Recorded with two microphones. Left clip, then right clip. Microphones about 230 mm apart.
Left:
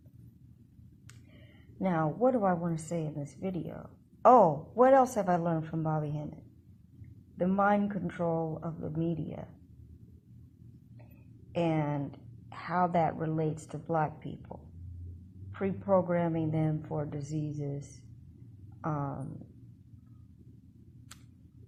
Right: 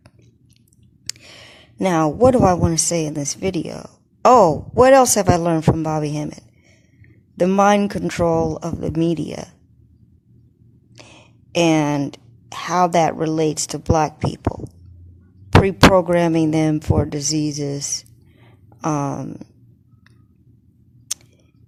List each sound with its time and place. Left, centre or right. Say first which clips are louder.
1.8 s a woman's voice: right 14 dB; right
7.3 s a woman's voice: right 13 dB; right
11.5 s a woman's voice: right 15 dB; right
15.4 s a woman's voice: right 18 dB; right